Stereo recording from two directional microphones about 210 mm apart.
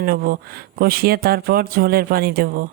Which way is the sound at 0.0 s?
45° right (ahead or behind).